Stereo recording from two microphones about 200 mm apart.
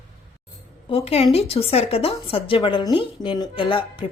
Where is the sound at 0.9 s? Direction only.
30° left (ahead or behind).